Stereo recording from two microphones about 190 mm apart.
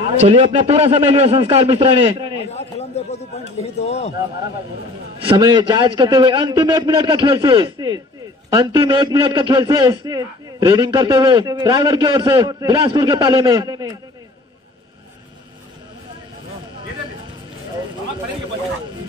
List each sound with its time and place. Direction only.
0.0 s a man's voice: 35° right (ahead or behind)
2.5 s a man's voice: 35° left (ahead or behind)
5.2 s a man's voice: 25° right (ahead or behind)